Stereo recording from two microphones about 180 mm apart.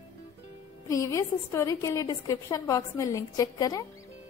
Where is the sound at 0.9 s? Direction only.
15° left (ahead or behind).